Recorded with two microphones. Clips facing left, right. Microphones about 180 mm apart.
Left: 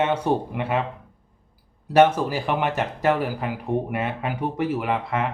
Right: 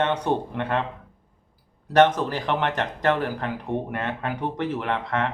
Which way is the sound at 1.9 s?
10° left (ahead or behind).